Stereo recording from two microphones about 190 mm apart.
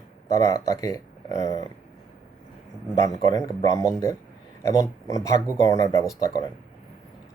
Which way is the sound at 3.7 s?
15° left (ahead or behind).